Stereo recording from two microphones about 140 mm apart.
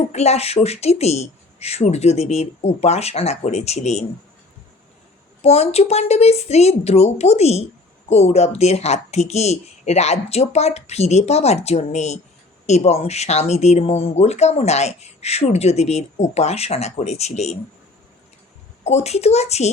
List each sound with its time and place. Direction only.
0.1 s speech: 50° left (ahead or behind)
5.4 s speech: 50° left (ahead or behind)
18.9 s speech: 50° left (ahead or behind)